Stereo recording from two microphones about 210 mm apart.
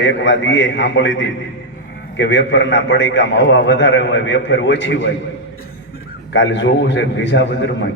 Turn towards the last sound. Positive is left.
turn(degrees=60)  # may be behind; listen again after turning